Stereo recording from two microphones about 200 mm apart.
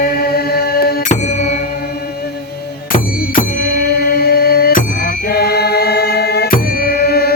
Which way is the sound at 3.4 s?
45° left (ahead or behind).